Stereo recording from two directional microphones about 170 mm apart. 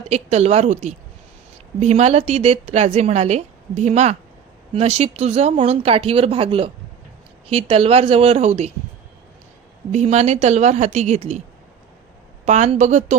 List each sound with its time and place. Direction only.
0.1 s a woman's voice: 40° right (ahead or behind)
9.9 s a woman's voice: 40° right (ahead or behind)
12.5 s speech: 40° right (ahead or behind)